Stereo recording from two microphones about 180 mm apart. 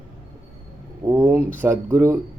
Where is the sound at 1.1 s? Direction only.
10° right (ahead or behind).